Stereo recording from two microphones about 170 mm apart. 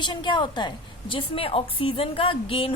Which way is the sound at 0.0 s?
25° left (ahead or behind).